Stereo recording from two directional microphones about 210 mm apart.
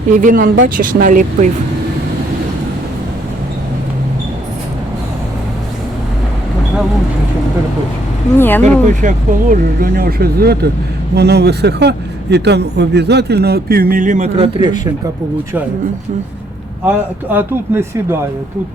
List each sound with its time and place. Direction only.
0.2 s speech: 40° right (ahead or behind)
8.4 s speech: 10° left (ahead or behind)
8.9 s a man's voice: 40° right (ahead or behind); by 14.8 s 25° right (ahead or behind)
16.8 s speech: 10° right (ahead or behind)